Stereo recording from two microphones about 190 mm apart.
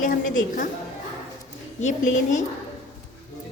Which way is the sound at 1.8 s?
40° left (ahead or behind).